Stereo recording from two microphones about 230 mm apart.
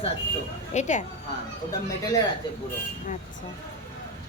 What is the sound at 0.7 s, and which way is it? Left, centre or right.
Speech, left.